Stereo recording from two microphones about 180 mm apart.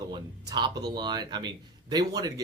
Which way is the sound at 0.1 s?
25° right (ahead or behind).